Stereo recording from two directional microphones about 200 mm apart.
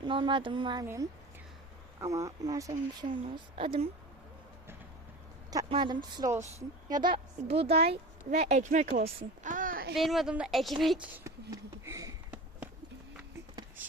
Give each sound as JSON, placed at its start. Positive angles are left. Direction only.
{"t": 0.0, "sound": "speech", "side_deg": -25}
{"t": 3.2, "sound": "speech", "side_deg": -30}
{"t": 5.5, "sound": "a child's voice", "side_deg": -20}
{"t": 9.9, "sound": "a woman's voice", "side_deg": 0}
{"t": 11.5, "sound": "a sound", "side_deg": -15}